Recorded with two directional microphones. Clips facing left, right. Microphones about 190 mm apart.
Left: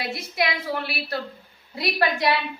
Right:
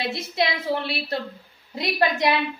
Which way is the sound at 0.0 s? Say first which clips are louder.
Right 2 dB; 25° right (ahead or behind).